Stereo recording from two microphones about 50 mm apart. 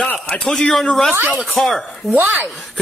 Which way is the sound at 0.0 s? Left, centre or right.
Left.